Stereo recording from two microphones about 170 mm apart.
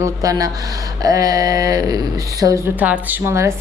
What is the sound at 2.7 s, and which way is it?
Speech, 10° right (ahead or behind).